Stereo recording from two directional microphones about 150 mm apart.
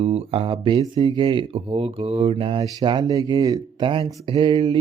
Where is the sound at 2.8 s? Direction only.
25° right (ahead or behind).